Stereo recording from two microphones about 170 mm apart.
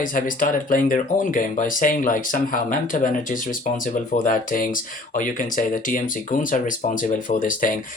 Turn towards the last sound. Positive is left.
turn(degrees=50)  # may be behind; listen again after turning